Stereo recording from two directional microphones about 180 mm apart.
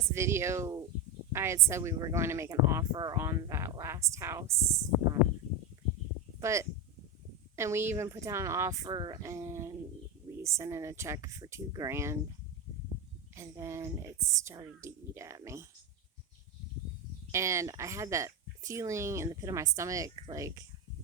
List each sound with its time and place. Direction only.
0.1 s speech: 15° right (ahead or behind)
6.4 s speech: 15° right (ahead or behind)
13.3 s speech: 15° right (ahead or behind)
17.3 s speech: 15° right (ahead or behind)